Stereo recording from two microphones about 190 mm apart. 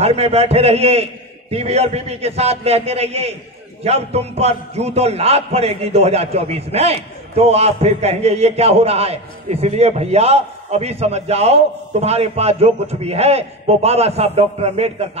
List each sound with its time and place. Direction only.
0.0 s a man's voice: 35° right (ahead or behind)